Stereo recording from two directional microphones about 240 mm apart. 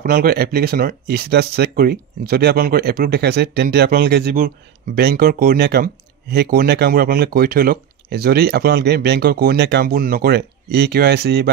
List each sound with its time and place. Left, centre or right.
0.0 s speech: right